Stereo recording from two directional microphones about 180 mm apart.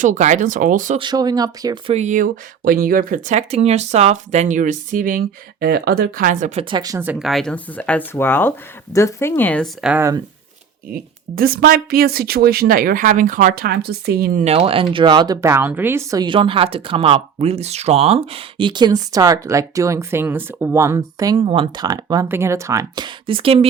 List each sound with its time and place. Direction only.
0.0 s speech: 45° right (ahead or behind)
0.9 s speech: 25° right (ahead or behind)
1.9 s speech: 40° right (ahead or behind); by 7.0 s 20° right (ahead or behind)
7.0 s speech: 5° right (ahead or behind)
9.8 s speech: 10° right (ahead or behind)
10.8 s speech: 55° right (ahead or behind)
14.4 s speech: 30° right (ahead or behind)